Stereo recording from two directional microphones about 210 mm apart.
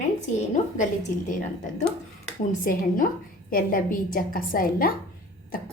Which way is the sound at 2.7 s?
40° left (ahead or behind).